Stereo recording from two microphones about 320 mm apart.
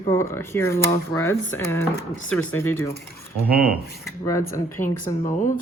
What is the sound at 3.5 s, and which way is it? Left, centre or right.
Speech, centre.